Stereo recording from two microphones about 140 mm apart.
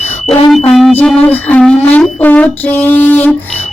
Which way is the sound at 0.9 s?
10° left (ahead or behind).